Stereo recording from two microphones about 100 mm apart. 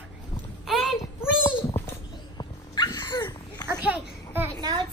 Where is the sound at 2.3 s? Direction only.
45° left (ahead or behind).